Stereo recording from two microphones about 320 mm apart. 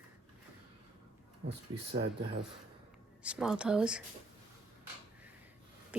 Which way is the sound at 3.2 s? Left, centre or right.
Centre.